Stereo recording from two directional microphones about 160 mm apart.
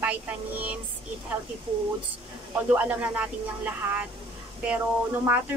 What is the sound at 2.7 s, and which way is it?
A woman's voice, 10° right (ahead or behind).